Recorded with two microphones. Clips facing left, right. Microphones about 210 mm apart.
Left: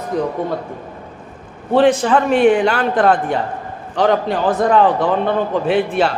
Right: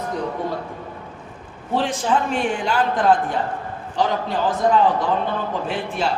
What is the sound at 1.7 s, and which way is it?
A man's voice, 60° left (ahead or behind).